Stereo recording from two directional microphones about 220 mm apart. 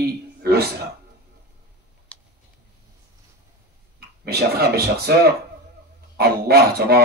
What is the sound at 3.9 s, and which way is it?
Speech, 45° right (ahead or behind).